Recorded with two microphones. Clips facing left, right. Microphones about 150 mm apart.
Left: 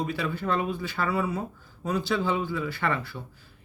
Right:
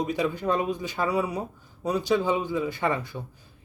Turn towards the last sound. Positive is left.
turn(degrees=-15)  # may be behind; listen again after turning